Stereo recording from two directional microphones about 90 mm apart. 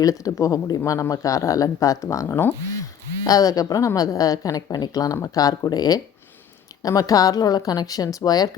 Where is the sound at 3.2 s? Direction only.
40° left (ahead or behind).